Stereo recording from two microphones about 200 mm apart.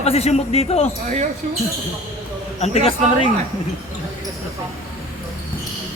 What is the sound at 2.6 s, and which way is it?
Speech, 30° left (ahead or behind).